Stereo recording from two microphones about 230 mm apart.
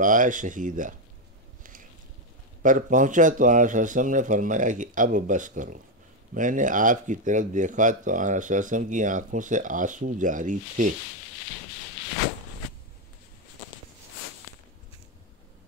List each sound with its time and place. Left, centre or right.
0.0 s speech: right
1.6 s a sound: right
2.6 s speech: right